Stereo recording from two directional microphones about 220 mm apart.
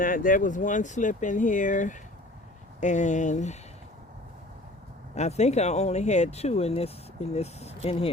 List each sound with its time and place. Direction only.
0.0 s speech: 40° left (ahead or behind)
5.1 s speech: 30° left (ahead or behind)